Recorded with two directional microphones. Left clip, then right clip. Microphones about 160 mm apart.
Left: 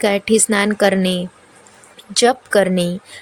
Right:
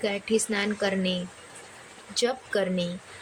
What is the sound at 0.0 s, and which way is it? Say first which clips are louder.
A woman's voice: left 11 dB; 55° left (ahead or behind).